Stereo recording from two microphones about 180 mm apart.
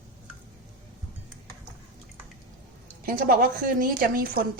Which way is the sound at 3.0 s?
50° right (ahead or behind).